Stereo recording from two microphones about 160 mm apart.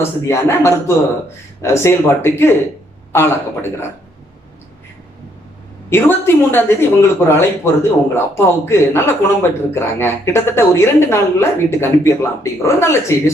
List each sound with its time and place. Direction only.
0.3 s a man's voice: 15° left (ahead or behind)
5.9 s a man's voice: 15° left (ahead or behind)